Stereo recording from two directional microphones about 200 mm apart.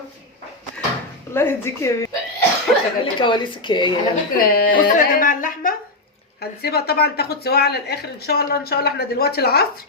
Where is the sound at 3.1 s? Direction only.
25° left (ahead or behind).